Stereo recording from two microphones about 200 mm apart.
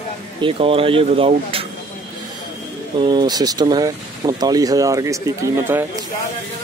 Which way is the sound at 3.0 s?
20° right (ahead or behind).